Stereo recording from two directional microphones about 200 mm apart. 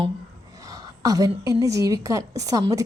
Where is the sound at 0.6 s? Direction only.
20° right (ahead or behind).